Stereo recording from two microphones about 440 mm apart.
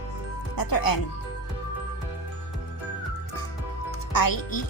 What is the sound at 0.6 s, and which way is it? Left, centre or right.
Speech, left.